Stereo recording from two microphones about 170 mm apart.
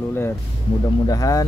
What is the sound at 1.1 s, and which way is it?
Speech, 20° left (ahead or behind).